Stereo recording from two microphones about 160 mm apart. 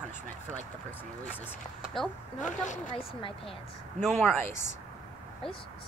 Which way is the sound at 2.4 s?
50° left (ahead or behind).